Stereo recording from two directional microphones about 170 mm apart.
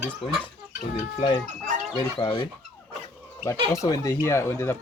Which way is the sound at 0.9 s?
35° left (ahead or behind).